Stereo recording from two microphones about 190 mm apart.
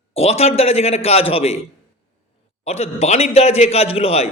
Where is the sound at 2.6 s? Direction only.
35° left (ahead or behind).